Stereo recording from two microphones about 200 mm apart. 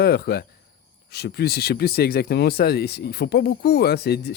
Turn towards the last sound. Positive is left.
turn(degrees=55)  # may be behind; listen again after turning